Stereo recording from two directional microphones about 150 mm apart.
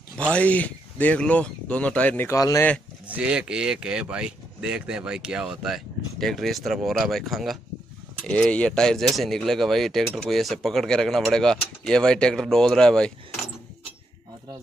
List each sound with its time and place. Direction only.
0.2 s speech: 10° left (ahead or behind)
3.1 s speech: 5° right (ahead or behind)